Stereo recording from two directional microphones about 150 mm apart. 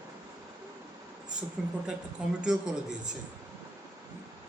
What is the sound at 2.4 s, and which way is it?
Speech, 5° right (ahead or behind).